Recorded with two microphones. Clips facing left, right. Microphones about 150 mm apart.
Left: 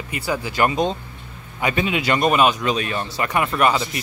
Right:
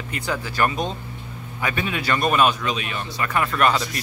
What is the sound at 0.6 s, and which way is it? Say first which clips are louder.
Speech: left 4 dB; 20° left (ahead or behind).